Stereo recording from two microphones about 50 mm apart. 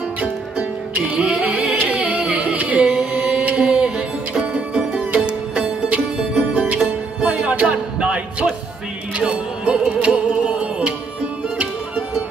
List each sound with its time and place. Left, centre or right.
0.2 s music: right
1.7 s singing: right
3.5 s music: centre
5.1 s music: right